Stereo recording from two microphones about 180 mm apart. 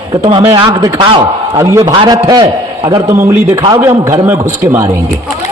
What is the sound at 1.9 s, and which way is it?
A man's voice, 25° right (ahead or behind).